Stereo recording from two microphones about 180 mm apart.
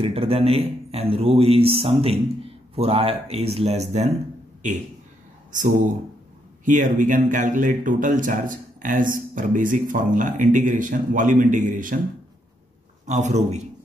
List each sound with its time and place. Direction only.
0.0 s a man's voice: 30° right (ahead or behind)
6.6 s speech: 45° right (ahead or behind)
13.0 s a man's voice: 40° right (ahead or behind)